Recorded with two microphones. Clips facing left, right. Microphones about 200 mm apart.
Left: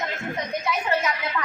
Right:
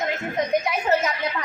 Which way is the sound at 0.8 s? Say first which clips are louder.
Right 3 dB; 40° right (ahead or behind).